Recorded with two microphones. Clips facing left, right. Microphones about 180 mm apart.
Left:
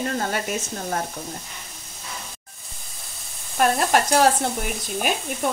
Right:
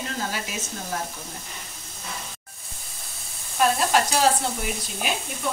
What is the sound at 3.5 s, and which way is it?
Frying, 55° left (ahead or behind).